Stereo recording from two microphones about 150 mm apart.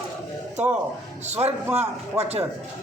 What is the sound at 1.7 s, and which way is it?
Speech, 45° right (ahead or behind).